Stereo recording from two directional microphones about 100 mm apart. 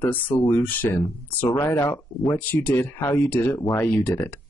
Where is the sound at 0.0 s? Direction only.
20° left (ahead or behind).